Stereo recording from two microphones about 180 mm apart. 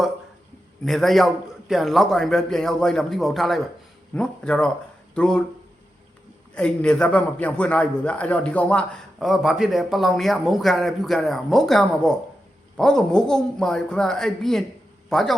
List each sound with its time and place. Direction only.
0.9 s a man's voice: centre (ahead or behind)
6.5 s a man's voice: 5° left (ahead or behind)